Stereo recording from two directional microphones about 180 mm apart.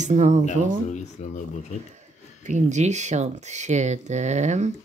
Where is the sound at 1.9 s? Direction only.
40° right (ahead or behind).